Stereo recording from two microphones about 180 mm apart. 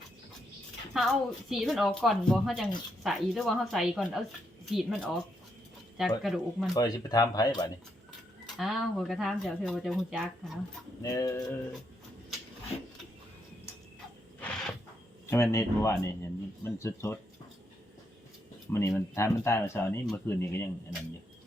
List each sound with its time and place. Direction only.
0.9 s speech: centre (ahead or behind)
6.7 s speech: 20° left (ahead or behind)
8.5 s speech: centre (ahead or behind)
11.0 s speech: 20° left (ahead or behind)
14.4 s a sound: 5° left (ahead or behind)
15.3 s a man's voice: 15° left (ahead or behind)
18.7 s a man's voice: 15° left (ahead or behind)